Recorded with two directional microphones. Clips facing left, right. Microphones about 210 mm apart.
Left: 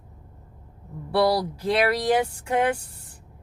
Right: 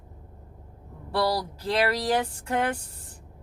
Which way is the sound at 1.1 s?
10° left (ahead or behind).